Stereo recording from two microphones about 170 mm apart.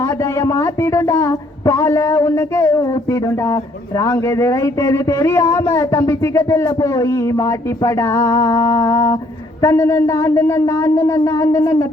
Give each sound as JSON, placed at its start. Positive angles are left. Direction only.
{"t": 0.0, "sound": "speech", "side_deg": 15}